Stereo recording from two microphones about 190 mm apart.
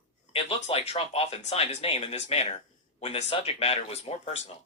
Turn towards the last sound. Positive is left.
turn(degrees=35)  # may be behind; listen again after turning